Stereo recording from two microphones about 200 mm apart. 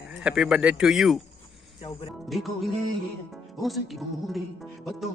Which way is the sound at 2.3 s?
Centre (ahead or behind).